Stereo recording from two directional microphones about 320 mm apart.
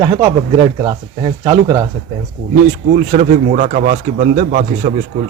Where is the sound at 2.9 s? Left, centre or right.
Right.